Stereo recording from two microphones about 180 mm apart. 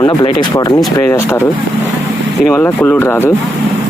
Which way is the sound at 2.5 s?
10° left (ahead or behind).